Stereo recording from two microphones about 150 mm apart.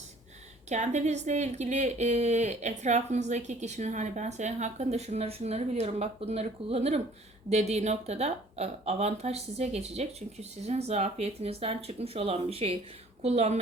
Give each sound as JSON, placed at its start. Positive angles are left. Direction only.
{"t": 0.7, "sound": "a woman's voice", "side_deg": -50}